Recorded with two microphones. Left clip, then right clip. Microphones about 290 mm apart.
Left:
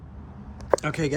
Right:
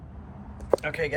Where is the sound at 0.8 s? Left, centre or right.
Left.